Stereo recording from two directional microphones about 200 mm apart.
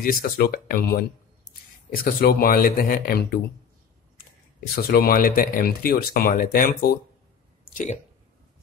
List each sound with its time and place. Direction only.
0.0 s speech: 45° left (ahead or behind)
2.1 s speech: 50° left (ahead or behind)
4.7 s speech: 50° left (ahead or behind)